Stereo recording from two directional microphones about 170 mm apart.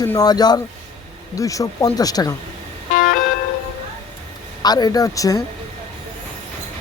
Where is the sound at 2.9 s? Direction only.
60° left (ahead or behind).